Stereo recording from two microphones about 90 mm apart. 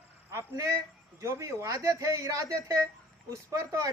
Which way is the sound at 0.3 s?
35° right (ahead or behind).